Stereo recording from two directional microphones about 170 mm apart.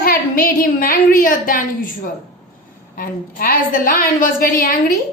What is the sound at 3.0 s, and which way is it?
A woman's voice, 55° left (ahead or behind).